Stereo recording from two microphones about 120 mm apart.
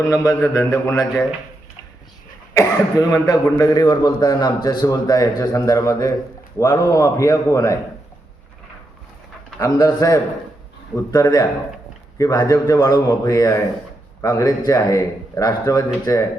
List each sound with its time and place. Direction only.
0.0 s a man's voice: 25° left (ahead or behind)
2.6 s a man's voice: 25° left (ahead or behind)
9.6 s a man's voice: 30° left (ahead or behind)